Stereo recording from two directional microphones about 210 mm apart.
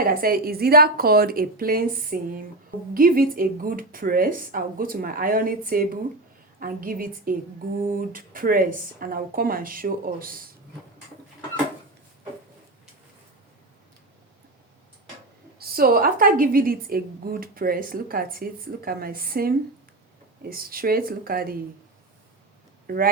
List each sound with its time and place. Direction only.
0.0 s a woman's voice: 45° right (ahead or behind)
15.5 s a woman's voice: 45° right (ahead or behind)